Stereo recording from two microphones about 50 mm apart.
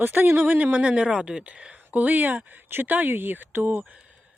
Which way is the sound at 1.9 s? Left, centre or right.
Right.